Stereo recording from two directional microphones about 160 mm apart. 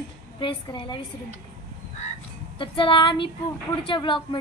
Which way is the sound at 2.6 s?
30° left (ahead or behind).